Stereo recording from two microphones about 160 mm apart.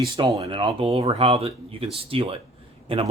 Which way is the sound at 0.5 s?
30° right (ahead or behind).